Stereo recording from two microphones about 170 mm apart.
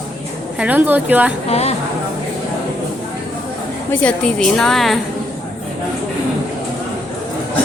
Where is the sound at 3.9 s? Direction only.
5° left (ahead or behind).